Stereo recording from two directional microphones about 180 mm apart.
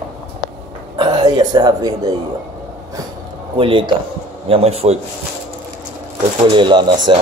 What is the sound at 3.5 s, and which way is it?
A man's voice, 30° right (ahead or behind).